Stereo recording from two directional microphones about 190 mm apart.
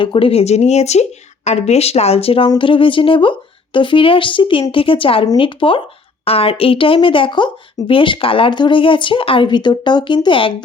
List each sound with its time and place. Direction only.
0.0 s speech: 25° left (ahead or behind)